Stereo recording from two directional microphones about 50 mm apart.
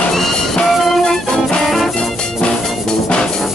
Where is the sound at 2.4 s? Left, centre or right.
Centre.